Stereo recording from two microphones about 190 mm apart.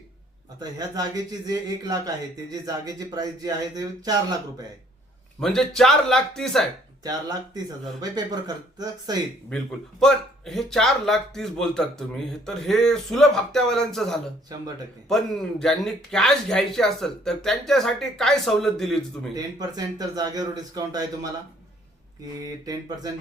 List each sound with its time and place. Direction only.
0.6 s speech: 20° right (ahead or behind)
5.4 s a man's voice: centre (ahead or behind)
7.0 s speech: 20° right (ahead or behind)
10.0 s a man's voice: centre (ahead or behind)
14.5 s speech: 20° right (ahead or behind)
15.1 s a man's voice: centre (ahead or behind)
19.5 s speech: 20° right (ahead or behind)